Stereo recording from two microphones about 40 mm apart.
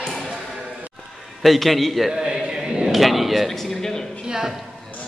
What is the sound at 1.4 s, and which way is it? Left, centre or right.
Speech, centre.